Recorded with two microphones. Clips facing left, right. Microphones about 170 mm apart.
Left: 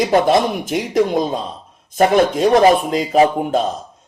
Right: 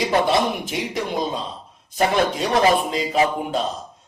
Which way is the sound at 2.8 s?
45° left (ahead or behind).